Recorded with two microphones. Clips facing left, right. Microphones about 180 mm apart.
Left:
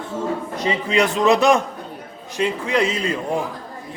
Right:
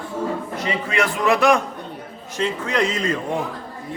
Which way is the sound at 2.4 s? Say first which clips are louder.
Left 2 dB; 10° left (ahead or behind).